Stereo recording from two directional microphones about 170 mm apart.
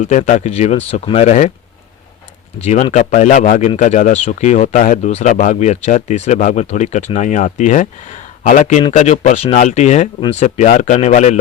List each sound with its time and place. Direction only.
0.0 s speech: 45° left (ahead or behind)
2.6 s speech: 40° left (ahead or behind)